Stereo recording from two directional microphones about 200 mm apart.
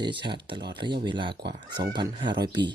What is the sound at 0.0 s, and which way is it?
Speech, 25° right (ahead or behind).